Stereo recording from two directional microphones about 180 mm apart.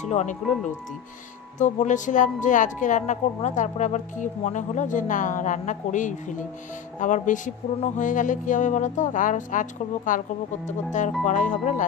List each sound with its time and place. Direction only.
0.0 s speech: 40° left (ahead or behind)
1.6 s speech: 45° left (ahead or behind)
11.2 s speech: 45° left (ahead or behind)